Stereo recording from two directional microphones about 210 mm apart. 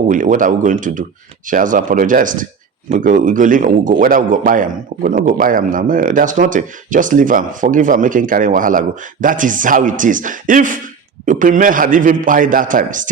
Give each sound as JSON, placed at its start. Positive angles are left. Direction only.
{"t": 0.1, "sound": "a man's voice", "side_deg": -40}